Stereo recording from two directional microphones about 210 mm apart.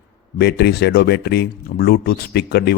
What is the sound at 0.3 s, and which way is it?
Speech, 50° left (ahead or behind).